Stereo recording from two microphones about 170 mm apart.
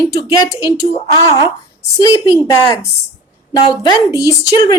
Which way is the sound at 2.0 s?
20° left (ahead or behind).